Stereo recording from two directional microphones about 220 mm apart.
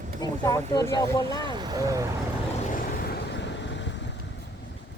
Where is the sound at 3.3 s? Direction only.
55° left (ahead or behind).